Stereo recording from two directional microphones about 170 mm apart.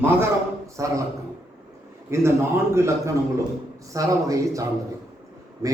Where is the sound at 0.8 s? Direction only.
15° right (ahead or behind).